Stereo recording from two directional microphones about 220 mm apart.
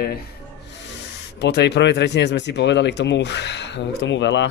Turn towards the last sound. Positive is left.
turn(degrees=55)  # may be behind; listen again after turning